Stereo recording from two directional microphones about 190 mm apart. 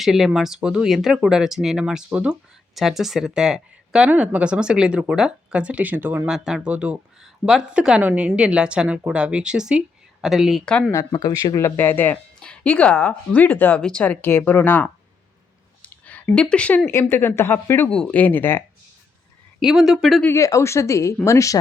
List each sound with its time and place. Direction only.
0.0 s speech: centre (ahead or behind)
10.9 s speech: 20° left (ahead or behind)
15.9 s speech: 5° left (ahead or behind)
19.6 s speech: centre (ahead or behind)
20.2 s speech: 15° left (ahead or behind)